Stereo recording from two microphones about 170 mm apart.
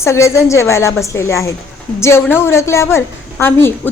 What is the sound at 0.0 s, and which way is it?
A woman's voice, 15° left (ahead or behind).